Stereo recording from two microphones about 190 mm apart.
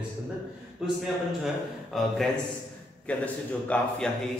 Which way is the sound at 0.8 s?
5° right (ahead or behind).